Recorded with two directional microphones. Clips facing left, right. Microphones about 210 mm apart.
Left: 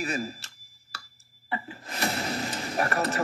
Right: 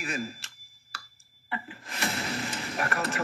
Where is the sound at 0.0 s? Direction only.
35° left (ahead or behind).